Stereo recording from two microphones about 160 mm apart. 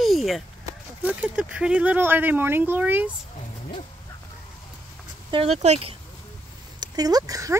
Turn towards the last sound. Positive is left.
turn(degrees=-20)  # may be behind; listen again after turning